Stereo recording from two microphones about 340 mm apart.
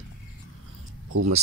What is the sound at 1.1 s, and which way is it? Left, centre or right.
Speech, right.